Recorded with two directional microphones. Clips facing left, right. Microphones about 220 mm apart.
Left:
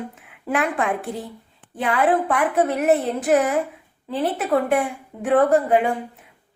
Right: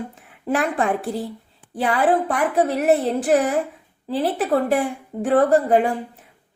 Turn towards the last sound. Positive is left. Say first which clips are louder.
# right 1 dB
turn(degrees=-35)  # may be behind; listen again after turning